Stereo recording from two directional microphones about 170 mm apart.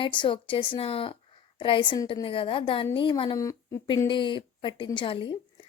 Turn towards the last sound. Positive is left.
turn(degrees=30)  # may be behind; listen again after turning